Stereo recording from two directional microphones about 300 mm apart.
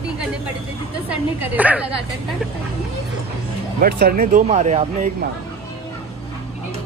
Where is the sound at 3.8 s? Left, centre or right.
Right.